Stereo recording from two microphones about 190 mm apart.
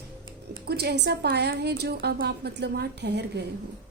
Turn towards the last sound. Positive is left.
turn(degrees=-60)  # may be behind; listen again after turning